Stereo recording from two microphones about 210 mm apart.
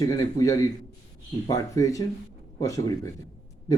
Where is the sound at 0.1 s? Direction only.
15° left (ahead or behind).